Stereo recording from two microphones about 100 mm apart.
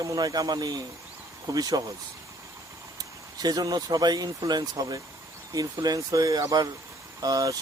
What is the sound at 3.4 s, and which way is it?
Speech, 40° right (ahead or behind).